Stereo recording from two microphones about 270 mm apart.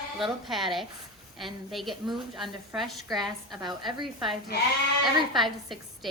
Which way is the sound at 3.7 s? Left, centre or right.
Centre.